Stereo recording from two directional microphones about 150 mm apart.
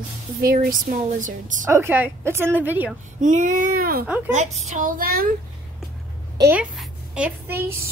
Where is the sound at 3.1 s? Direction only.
55° right (ahead or behind); by 4.1 s 75° right (ahead or behind).